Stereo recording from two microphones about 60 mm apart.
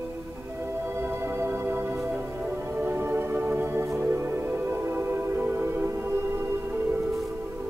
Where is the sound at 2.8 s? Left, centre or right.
Right.